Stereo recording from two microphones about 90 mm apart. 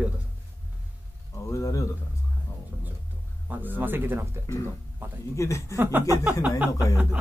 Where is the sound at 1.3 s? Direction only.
35° left (ahead or behind).